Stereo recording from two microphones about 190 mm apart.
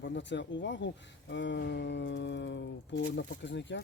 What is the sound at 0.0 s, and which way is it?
Speech, 75° left (ahead or behind).